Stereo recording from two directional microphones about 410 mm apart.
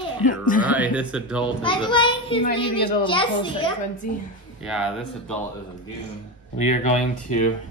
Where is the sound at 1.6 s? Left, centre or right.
Centre.